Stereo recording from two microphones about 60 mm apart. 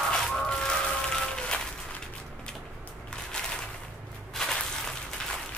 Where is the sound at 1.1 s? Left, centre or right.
Centre.